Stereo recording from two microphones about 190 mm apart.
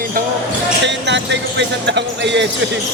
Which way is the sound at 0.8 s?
70° right (ahead or behind).